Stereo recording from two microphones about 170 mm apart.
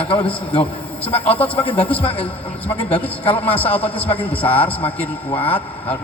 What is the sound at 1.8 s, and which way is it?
Speech, 10° left (ahead or behind).